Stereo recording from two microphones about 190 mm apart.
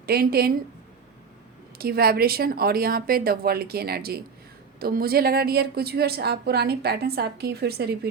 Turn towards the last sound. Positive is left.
turn(degrees=-55)  # may be behind; listen again after turning